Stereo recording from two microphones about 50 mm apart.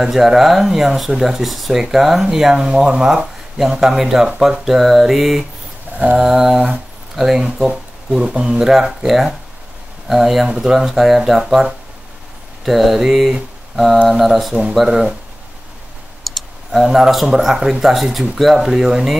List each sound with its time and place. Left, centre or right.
0.0 s speech: centre
7.4 s speech: centre
14.5 s speech: centre
16.3 s clicking: centre
17.4 s speech: centre